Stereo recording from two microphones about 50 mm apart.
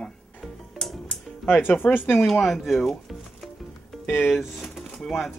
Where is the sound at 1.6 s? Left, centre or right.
Left.